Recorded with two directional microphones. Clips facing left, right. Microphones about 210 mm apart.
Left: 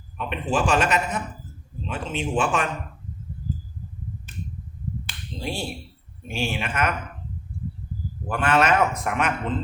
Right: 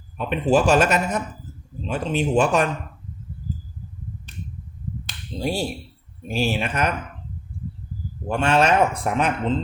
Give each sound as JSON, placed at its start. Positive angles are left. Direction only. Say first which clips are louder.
{"t": 0.2, "sound": "speech", "louder": "right 6 dB", "side_deg": -40}
{"t": 5.4, "sound": "speech", "louder": "right 5 dB", "side_deg": -40}
{"t": 8.3, "sound": "speech", "louder": "right 2 dB", "side_deg": -25}